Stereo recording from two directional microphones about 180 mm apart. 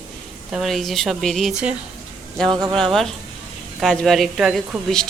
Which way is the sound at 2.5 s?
20° right (ahead or behind).